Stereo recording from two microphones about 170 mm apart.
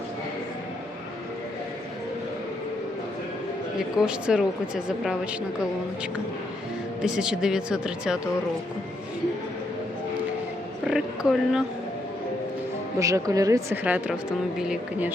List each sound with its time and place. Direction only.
3.8 s speech: 5° right (ahead or behind)
7.0 s speech: 5° right (ahead or behind)
10.8 s speech: centre (ahead or behind)
13.0 s speech: 20° right (ahead or behind)
13.8 s speech: 5° right (ahead or behind)